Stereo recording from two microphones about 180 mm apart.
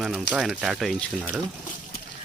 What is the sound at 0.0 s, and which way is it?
Speech, centre (ahead or behind).